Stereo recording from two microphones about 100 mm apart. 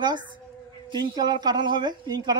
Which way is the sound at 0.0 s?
50° right (ahead or behind).